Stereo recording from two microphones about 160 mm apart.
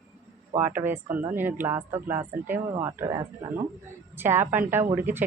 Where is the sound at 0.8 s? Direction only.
10° right (ahead or behind).